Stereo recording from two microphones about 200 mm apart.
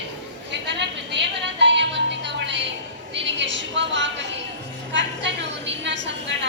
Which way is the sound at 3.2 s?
65° right (ahead or behind).